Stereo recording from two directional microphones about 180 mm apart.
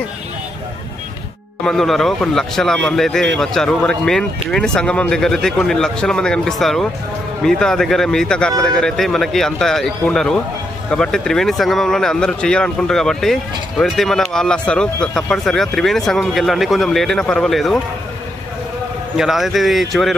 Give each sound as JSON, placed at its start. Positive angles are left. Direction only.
{"t": 1.6, "sound": "speech", "side_deg": 0}
{"t": 19.1, "sound": "speech", "side_deg": 0}